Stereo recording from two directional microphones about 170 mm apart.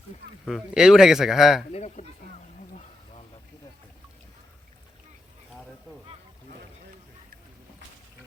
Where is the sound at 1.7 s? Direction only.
40° left (ahead or behind).